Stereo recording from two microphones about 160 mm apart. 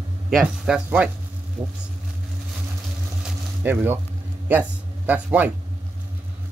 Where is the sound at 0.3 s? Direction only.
5° right (ahead or behind).